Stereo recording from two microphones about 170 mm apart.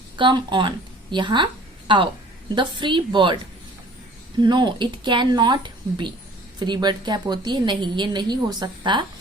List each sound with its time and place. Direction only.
0.2 s a woman's voice: 25° right (ahead or behind)
4.4 s a woman's voice: 25° right (ahead or behind)